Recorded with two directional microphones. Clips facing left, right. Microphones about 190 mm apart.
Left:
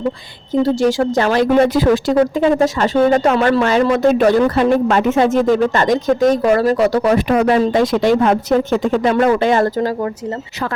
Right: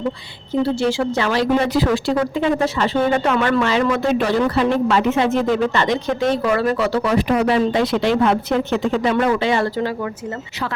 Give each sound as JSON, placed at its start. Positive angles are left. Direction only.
{"t": 0.6, "sound": "speech", "side_deg": 45}